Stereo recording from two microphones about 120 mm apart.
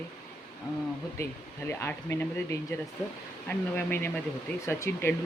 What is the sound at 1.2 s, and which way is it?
Speech, 25° left (ahead or behind).